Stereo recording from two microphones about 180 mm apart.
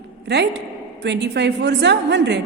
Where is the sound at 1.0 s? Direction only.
75° right (ahead or behind).